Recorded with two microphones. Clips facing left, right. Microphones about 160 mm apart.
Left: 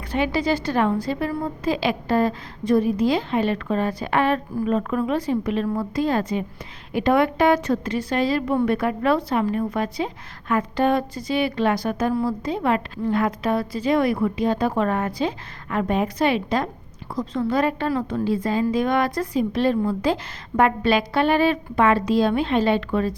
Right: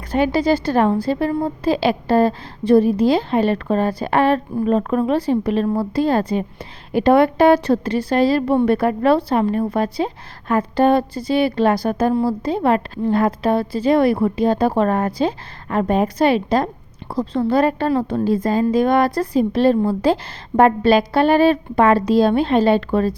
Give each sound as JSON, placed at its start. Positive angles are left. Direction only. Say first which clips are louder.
{"t": 0.1, "sound": "a woman's voice", "louder": "right 5 dB", "side_deg": -40}
{"t": 18.3, "sound": "a woman's voice", "louder": "right 4 dB", "side_deg": -45}